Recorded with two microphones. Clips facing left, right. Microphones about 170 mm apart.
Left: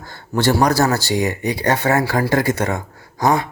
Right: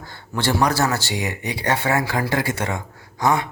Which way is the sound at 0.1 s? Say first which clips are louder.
Left 5 dB; 40° left (ahead or behind).